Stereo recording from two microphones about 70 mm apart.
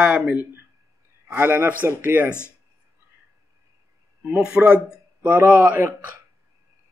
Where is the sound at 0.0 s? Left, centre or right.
Centre.